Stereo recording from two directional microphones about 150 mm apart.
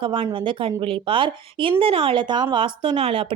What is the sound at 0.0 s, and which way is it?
Speech, 35° right (ahead or behind).